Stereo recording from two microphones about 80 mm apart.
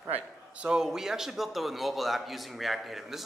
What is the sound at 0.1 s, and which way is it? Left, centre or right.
A man's voice, centre.